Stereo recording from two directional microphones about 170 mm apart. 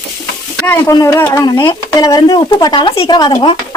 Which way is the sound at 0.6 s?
15° left (ahead or behind).